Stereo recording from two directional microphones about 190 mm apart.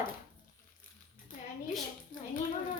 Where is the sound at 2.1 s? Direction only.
45° left (ahead or behind).